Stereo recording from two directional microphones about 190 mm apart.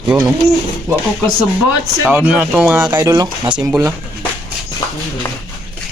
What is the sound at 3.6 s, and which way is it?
Speech, 10° right (ahead or behind).